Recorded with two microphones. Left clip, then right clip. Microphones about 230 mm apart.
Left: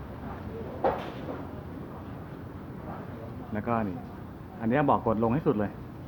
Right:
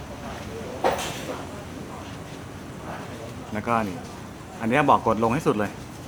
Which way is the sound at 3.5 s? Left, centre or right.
Centre.